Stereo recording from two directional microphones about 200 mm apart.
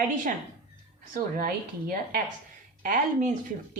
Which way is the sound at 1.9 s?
45° right (ahead or behind).